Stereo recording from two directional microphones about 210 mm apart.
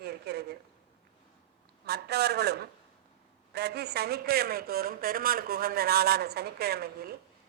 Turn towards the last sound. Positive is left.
turn(degrees=-50)  # may be behind; listen again after turning